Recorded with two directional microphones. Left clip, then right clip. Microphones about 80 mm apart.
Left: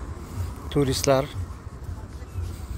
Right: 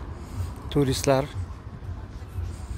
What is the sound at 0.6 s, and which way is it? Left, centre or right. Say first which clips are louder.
Speech: left 1 dB; right.